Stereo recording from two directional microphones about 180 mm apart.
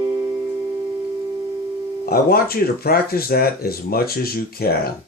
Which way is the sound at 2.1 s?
55° left (ahead or behind).